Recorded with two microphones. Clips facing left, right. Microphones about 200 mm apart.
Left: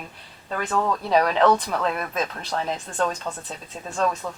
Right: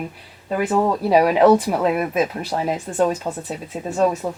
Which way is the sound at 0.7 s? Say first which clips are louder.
Right 4 dB; 25° right (ahead or behind).